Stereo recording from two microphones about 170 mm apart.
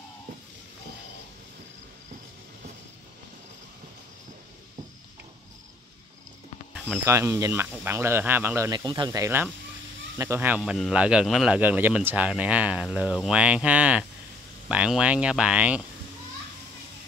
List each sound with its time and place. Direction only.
7.1 s speech: 15° right (ahead or behind)
10.6 s speech: centre (ahead or behind)